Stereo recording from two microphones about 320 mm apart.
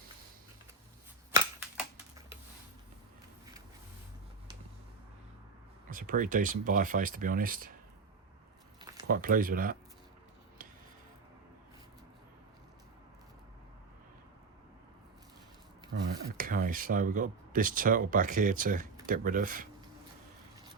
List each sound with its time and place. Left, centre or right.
5.9 s speech: right
9.0 s speech: right
15.9 s speech: right